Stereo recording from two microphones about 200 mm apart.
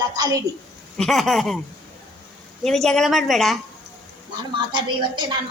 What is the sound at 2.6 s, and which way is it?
Speech, centre (ahead or behind).